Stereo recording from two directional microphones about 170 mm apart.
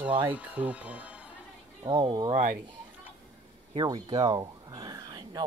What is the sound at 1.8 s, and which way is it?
Speech, 25° right (ahead or behind).